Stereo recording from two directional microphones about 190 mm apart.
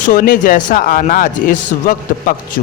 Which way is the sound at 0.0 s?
45° left (ahead or behind).